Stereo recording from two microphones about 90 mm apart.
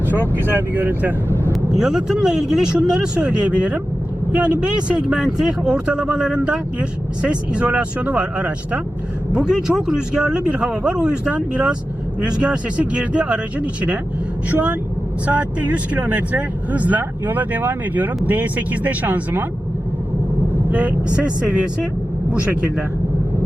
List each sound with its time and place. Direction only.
0.1 s speech: 25° right (ahead or behind)
1.8 s speech: 5° right (ahead or behind)
20.7 s speech: 15° right (ahead or behind)